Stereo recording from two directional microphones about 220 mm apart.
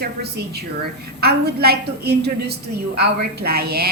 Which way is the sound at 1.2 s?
45° right (ahead or behind).